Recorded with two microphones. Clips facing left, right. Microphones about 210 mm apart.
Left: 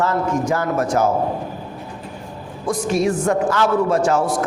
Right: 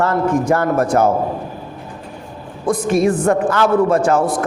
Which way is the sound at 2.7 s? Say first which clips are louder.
Right 4 dB; 55° right (ahead or behind).